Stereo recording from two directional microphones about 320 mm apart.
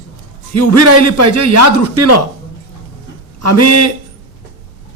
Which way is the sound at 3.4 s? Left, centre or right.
Right.